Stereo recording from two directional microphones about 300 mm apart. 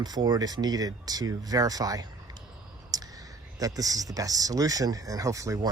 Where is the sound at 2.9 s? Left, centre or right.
Centre.